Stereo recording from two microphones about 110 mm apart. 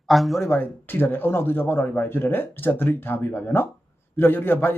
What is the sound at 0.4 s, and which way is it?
Speech, 20° left (ahead or behind).